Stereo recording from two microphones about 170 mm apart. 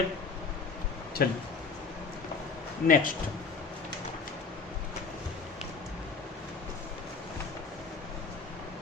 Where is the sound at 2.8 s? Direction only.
55° left (ahead or behind).